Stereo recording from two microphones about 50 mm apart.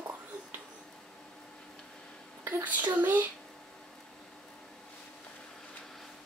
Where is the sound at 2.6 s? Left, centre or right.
Right.